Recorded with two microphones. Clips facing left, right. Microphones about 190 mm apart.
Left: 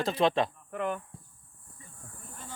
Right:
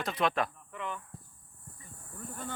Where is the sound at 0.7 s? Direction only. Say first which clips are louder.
Left 7 dB; 50° left (ahead or behind).